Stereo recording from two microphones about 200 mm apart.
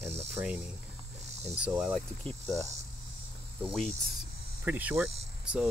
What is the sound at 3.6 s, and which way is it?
Speech, 5° right (ahead or behind).